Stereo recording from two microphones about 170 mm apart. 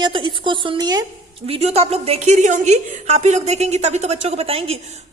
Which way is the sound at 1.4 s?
35° right (ahead or behind).